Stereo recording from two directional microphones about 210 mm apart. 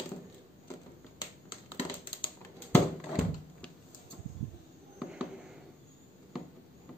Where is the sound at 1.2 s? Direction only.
25° left (ahead or behind).